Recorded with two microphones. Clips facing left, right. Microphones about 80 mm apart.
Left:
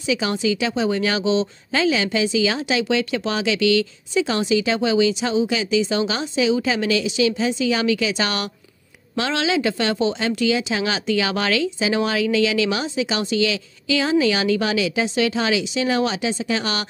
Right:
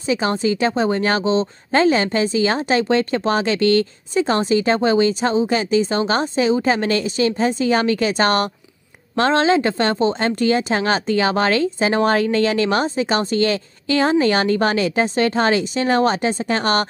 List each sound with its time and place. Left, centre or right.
0.1 s speech: right